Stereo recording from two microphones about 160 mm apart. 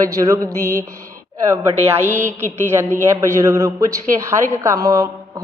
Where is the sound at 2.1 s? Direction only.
50° right (ahead or behind).